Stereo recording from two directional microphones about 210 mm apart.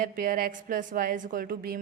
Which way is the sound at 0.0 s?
40° right (ahead or behind).